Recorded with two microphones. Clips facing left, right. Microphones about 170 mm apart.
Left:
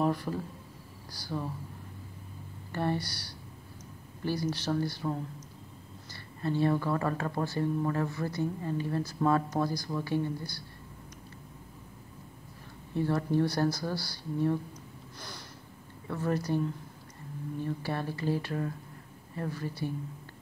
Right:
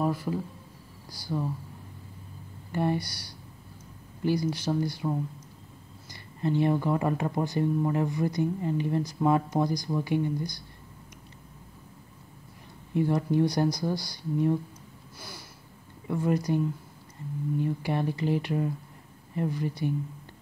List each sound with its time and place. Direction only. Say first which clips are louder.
0.0 s a man's voice: right 1 dB; 10° right (ahead or behind)
2.7 s speech: right 3 dB; 15° right (ahead or behind)
6.4 s speech: right 3 dB; 15° right (ahead or behind)
12.9 s speech: right 3 dB; 15° right (ahead or behind)
15.1 s a sound: right 1 dB; 10° right (ahead or behind)
16.1 s speech: right 4 dB; 15° right (ahead or behind)